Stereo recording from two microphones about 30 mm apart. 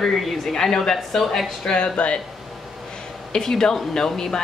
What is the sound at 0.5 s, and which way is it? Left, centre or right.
Speech, centre.